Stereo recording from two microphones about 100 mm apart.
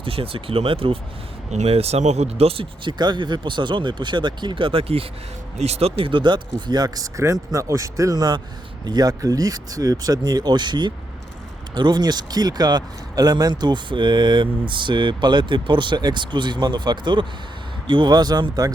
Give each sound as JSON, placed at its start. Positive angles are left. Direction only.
{"t": 0.0, "sound": "speech", "side_deg": -70}
{"t": 1.6, "sound": "speech", "side_deg": -90}
{"t": 3.0, "sound": "speech", "side_deg": -50}
{"t": 5.5, "sound": "speech", "side_deg": -90}